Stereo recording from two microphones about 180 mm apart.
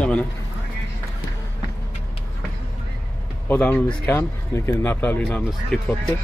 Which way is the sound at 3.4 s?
10° left (ahead or behind).